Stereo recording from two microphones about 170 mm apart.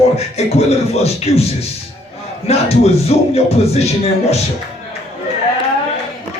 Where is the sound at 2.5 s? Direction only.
35° left (ahead or behind).